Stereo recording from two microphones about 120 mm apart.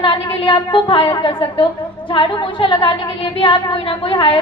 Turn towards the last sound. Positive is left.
turn(degrees=45)  # may be behind; listen again after turning